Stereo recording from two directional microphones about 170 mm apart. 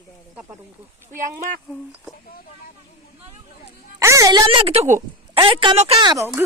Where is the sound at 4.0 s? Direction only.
15° right (ahead or behind); by 5.0 s 40° right (ahead or behind).